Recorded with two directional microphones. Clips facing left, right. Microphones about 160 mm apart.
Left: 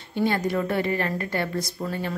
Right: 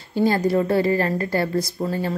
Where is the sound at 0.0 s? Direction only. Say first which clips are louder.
Right 5 dB; 35° right (ahead or behind).